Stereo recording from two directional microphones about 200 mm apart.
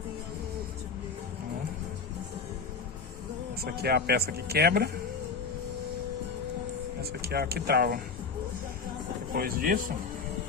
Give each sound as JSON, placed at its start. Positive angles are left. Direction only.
{"t": 3.6, "sound": "speech", "side_deg": -50}
{"t": 7.0, "sound": "speech", "side_deg": -50}
{"t": 9.3, "sound": "speech", "side_deg": -45}